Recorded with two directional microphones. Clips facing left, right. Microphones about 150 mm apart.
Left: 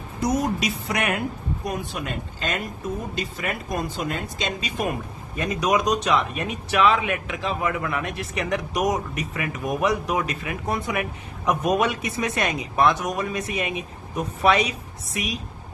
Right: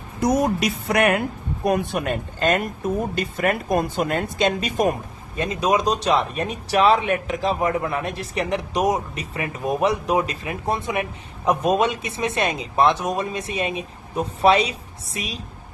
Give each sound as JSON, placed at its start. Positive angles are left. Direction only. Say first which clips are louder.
{"t": 0.2, "sound": "speech", "louder": "right 4 dB", "side_deg": -55}
{"t": 5.4, "sound": "speech", "louder": "right 2 dB", "side_deg": -30}